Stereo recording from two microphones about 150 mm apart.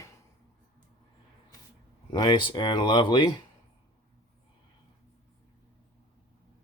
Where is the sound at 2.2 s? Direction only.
35° left (ahead or behind).